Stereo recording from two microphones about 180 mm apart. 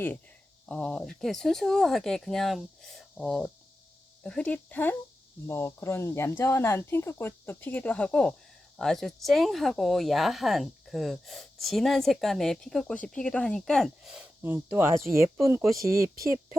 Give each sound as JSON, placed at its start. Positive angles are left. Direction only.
{"t": 0.7, "sound": "speech", "side_deg": 5}